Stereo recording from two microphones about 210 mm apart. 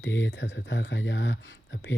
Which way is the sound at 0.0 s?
60° left (ahead or behind).